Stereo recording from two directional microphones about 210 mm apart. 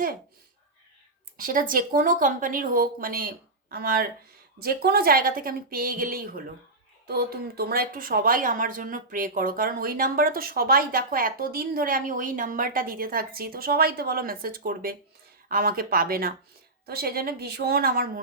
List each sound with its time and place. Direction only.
1.4 s a woman's voice: 40° right (ahead or behind)